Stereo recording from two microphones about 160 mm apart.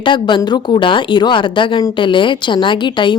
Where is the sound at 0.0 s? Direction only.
30° left (ahead or behind).